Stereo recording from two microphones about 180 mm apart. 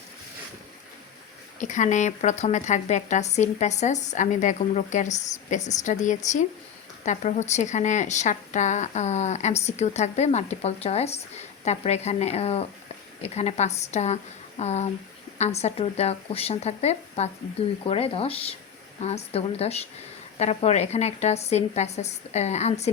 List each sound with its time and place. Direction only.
1.5 s a woman's voice: 45° left (ahead or behind)